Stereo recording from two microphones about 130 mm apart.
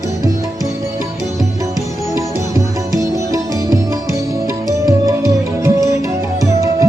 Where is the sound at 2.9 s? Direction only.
25° right (ahead or behind).